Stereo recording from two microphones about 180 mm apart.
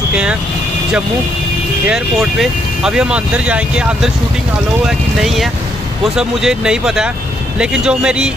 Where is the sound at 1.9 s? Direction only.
5° right (ahead or behind).